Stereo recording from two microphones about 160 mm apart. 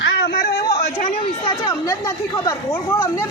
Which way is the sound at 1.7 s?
20° left (ahead or behind).